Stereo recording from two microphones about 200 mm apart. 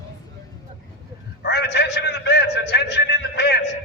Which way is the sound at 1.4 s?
60° left (ahead or behind).